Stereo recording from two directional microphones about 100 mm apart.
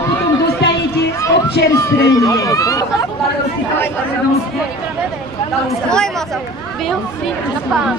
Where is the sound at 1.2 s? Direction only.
30° left (ahead or behind).